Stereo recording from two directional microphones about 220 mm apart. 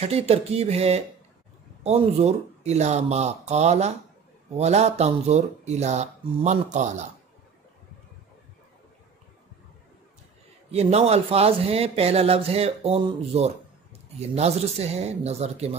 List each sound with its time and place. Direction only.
0.0 s speech: 30° right (ahead or behind)
10.7 s speech: 30° right (ahead or behind)